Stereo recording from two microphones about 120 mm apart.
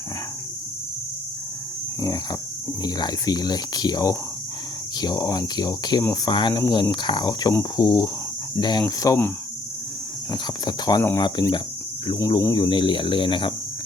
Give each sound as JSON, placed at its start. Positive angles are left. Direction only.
{"t": 2.0, "sound": "speech", "side_deg": 30}
{"t": 10.3, "sound": "speech", "side_deg": 35}